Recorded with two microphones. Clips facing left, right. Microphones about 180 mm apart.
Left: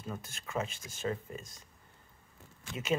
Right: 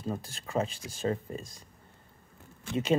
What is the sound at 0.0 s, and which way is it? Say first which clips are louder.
Speech: right 6 dB; 35° right (ahead or behind).